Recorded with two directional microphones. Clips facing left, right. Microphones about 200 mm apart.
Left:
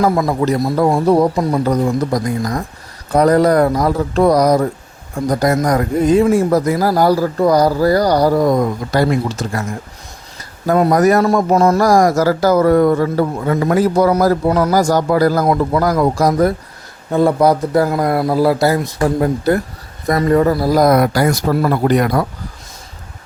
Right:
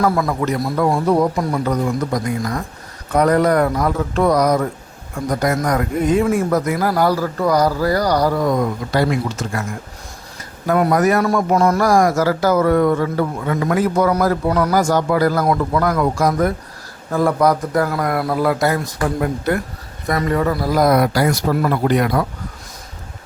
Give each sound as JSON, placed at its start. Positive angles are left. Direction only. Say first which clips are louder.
{"t": 0.0, "sound": "a man's voice", "louder": "left 3 dB", "side_deg": 20}
{"t": 1.6, "sound": "a man's voice", "louder": "left 4 dB", "side_deg": 35}
{"t": 10.7, "sound": "a man's voice", "louder": "left 3 dB", "side_deg": 30}
{"t": 11.5, "sound": "a man's voice", "louder": "left 2 dB", "side_deg": 25}
{"t": 11.8, "sound": "a man's voice", "louder": "left 3 dB", "side_deg": 40}
{"t": 17.1, "sound": "a man's voice", "louder": "left 3 dB", "side_deg": 25}